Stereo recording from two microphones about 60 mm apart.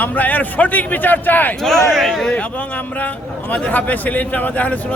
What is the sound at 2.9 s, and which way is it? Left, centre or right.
Speech, left.